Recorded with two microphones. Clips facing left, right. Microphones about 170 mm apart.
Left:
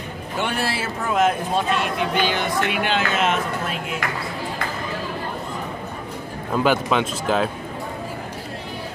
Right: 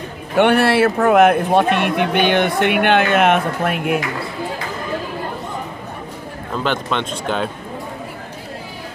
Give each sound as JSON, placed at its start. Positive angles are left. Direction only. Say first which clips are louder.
{"t": 0.4, "sound": "speech", "louder": "right 12 dB", "side_deg": -65}
{"t": 6.5, "sound": "a man's voice", "louder": "left 2 dB", "side_deg": 5}